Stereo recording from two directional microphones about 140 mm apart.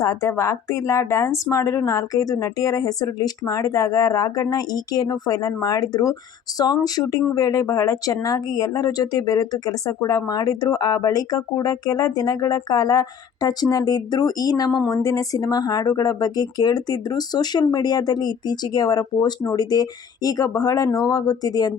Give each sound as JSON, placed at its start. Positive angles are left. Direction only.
{"t": 0.0, "sound": "speech", "side_deg": 20}